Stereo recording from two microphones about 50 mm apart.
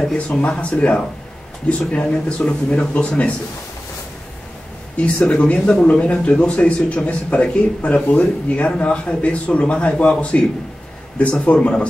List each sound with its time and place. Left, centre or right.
0.0 s speech: centre
0.4 s speech: left
4.9 s speech: left